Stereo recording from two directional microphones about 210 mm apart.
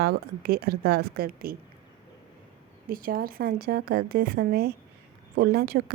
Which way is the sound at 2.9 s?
45° right (ahead or behind).